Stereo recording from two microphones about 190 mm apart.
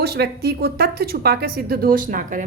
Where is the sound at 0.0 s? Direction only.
55° right (ahead or behind).